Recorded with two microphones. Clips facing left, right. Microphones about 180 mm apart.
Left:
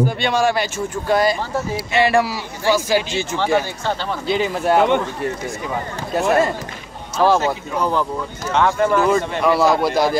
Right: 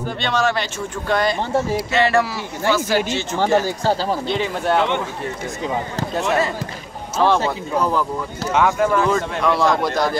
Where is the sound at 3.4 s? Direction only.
40° right (ahead or behind).